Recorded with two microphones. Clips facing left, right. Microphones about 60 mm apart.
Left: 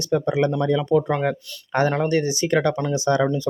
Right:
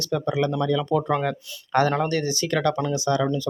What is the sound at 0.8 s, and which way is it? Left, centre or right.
Speech, centre.